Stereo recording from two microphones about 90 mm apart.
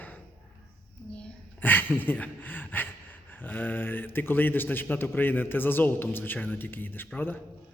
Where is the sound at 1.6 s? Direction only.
20° left (ahead or behind).